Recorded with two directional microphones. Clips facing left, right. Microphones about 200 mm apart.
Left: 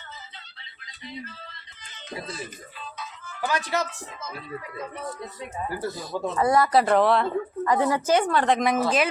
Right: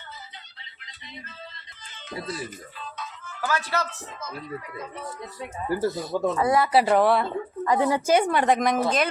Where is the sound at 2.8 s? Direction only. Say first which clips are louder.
Right 1 dB; 5° left (ahead or behind).